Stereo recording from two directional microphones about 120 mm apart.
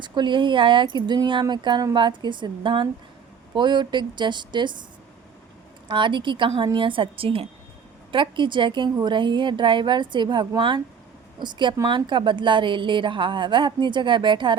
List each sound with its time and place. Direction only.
0.0 s speech: 40° right (ahead or behind)
5.9 s a woman's voice: 40° right (ahead or behind)